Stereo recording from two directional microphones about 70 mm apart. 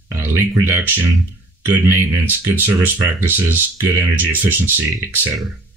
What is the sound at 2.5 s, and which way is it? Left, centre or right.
Speech, right.